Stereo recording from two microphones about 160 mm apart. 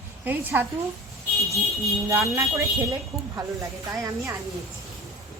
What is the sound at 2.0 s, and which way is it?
A woman's voice, 15° right (ahead or behind).